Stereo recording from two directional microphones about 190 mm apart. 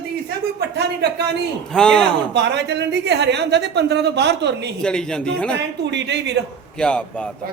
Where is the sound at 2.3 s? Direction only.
65° right (ahead or behind).